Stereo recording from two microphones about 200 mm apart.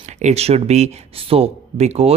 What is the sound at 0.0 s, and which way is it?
Speech, 35° right (ahead or behind).